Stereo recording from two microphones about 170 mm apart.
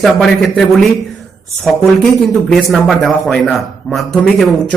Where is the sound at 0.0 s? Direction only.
Centre (ahead or behind).